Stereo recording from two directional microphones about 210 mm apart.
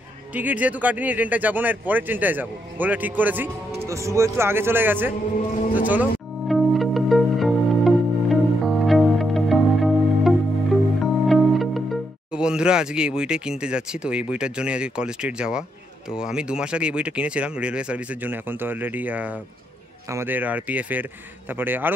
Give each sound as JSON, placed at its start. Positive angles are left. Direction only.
{"t": 0.3, "sound": "speech", "side_deg": -10}
{"t": 5.6, "sound": "speech", "side_deg": 40}
{"t": 6.4, "sound": "music", "side_deg": 0}
{"t": 11.2, "sound": "speech", "side_deg": 0}